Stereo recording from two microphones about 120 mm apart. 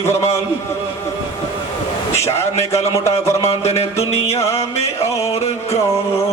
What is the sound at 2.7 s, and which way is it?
Speech, 25° left (ahead or behind).